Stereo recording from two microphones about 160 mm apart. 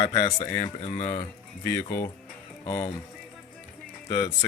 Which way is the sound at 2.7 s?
20° left (ahead or behind).